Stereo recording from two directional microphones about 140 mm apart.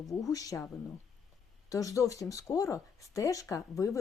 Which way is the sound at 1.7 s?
25° left (ahead or behind).